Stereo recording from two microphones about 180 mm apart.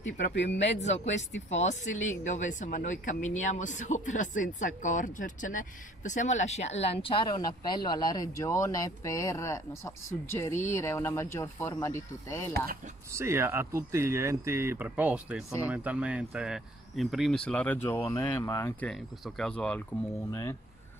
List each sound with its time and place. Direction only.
0.0 s speech: 75° left (ahead or behind)
0.7 s speech: 40° left (ahead or behind)
1.0 s speech: 90° left
2.0 s speech: 45° left (ahead or behind); by 12.4 s 15° left (ahead or behind)
13.1 s speech: 15° right (ahead or behind); by 18.9 s 15° left (ahead or behind)
18.9 s speech: centre (ahead or behind)
20.2 s speech: 20° left (ahead or behind)